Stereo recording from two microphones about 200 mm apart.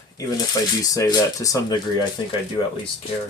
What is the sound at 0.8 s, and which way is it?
Speech, 15° left (ahead or behind).